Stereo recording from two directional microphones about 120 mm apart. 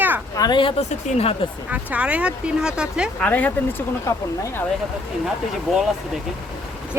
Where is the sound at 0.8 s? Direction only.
55° left (ahead or behind).